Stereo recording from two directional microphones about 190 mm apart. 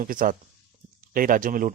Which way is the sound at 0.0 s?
45° right (ahead or behind).